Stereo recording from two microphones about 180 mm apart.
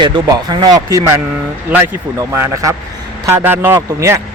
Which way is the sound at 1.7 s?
5° right (ahead or behind).